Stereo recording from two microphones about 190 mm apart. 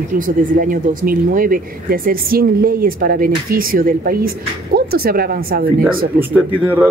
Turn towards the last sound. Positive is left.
turn(degrees=-10)  # may be behind; listen again after turning